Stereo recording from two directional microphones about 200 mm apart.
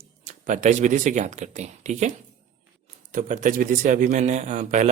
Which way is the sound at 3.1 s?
40° right (ahead or behind).